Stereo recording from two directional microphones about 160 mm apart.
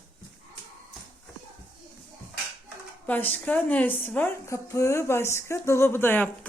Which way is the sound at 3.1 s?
10° left (ahead or behind).